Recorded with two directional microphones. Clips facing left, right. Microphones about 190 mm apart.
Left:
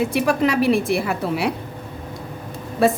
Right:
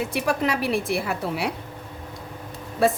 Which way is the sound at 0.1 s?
90° left.